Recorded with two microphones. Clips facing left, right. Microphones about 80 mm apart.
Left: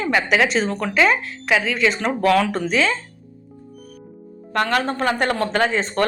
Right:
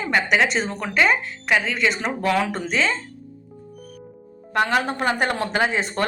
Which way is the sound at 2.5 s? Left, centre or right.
Centre.